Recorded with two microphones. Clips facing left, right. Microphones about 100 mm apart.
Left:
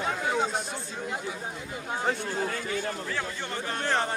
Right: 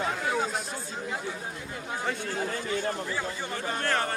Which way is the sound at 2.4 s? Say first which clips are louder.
Right 1 dB; 35° right (ahead or behind).